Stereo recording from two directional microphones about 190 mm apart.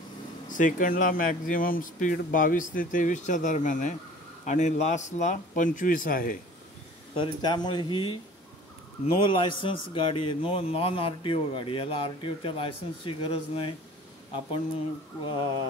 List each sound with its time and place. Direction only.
0.5 s speech: 45° left (ahead or behind)
7.2 s a man's voice: 25° left (ahead or behind)